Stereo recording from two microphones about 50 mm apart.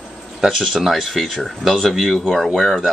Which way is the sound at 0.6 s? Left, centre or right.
Centre.